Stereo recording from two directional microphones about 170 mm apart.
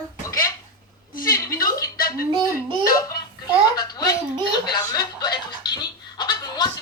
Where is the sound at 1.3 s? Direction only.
20° left (ahead or behind).